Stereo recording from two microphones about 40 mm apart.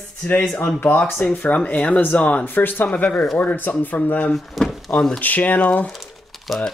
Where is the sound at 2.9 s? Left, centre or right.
Left.